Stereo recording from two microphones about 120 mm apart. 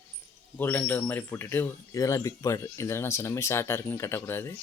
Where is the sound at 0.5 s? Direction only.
15° left (ahead or behind).